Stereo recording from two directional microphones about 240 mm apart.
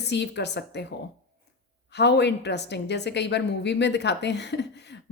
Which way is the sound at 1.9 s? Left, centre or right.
Left.